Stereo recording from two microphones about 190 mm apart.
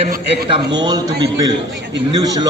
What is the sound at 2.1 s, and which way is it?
Speech, 20° right (ahead or behind).